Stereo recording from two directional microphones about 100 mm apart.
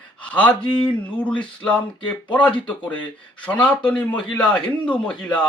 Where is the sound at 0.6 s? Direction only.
55° left (ahead or behind).